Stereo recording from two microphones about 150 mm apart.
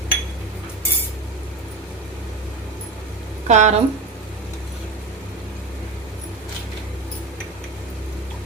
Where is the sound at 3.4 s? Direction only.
50° right (ahead or behind).